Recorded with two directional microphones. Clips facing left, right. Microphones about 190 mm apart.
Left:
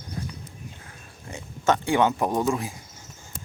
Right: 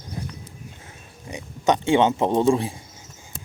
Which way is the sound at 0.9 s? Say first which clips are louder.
Right 3 dB; 15° right (ahead or behind).